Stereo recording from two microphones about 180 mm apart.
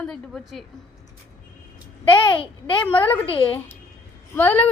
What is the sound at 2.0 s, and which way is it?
Speech, 25° left (ahead or behind).